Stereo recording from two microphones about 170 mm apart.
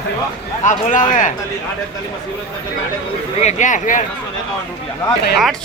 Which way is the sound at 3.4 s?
45° left (ahead or behind).